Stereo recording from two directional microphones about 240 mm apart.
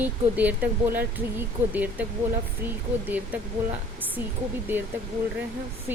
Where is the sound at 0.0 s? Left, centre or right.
Centre.